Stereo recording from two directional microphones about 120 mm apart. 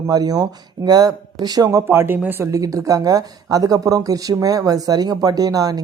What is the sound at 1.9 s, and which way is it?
Speech, 20° right (ahead or behind).